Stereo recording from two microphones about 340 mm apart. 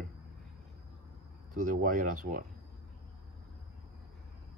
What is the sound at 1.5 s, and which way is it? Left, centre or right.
Speech, right.